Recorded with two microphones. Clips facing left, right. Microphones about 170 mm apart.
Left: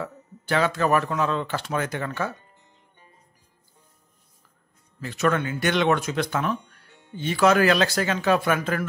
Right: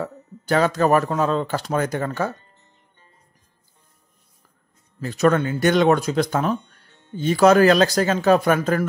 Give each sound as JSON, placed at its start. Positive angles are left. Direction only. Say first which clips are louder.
{"t": 0.0, "sound": "speech", "louder": "right 4 dB", "side_deg": -40}
{"t": 2.3, "sound": "music", "louder": "even", "side_deg": 10}
{"t": 5.0, "sound": "speech", "louder": "right 5 dB", "side_deg": -40}
{"t": 6.9, "sound": "music", "louder": "right 5 dB", "side_deg": 10}
{"t": 7.2, "sound": "speech", "louder": "right 5 dB", "side_deg": -40}